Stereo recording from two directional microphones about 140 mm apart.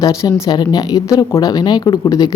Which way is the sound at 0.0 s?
25° left (ahead or behind).